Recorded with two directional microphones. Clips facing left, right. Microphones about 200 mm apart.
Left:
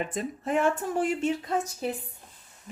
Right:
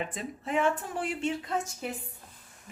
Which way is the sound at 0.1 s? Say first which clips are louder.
Left 4 dB; 45° left (ahead or behind).